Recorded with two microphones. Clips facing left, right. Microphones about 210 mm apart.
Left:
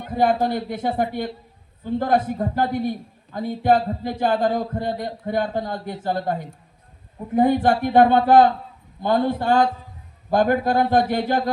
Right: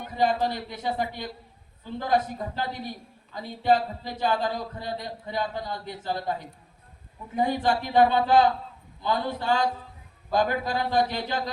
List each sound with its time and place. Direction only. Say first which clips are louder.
0.1 s speech: left 5 dB; 55° left (ahead or behind)